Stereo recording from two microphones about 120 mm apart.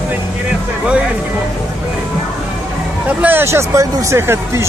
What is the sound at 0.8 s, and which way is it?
Speech, 10° right (ahead or behind).